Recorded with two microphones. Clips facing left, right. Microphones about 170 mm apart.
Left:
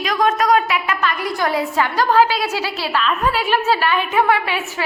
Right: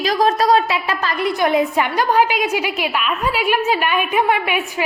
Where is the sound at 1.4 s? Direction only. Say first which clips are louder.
Right 3 dB; 20° right (ahead or behind).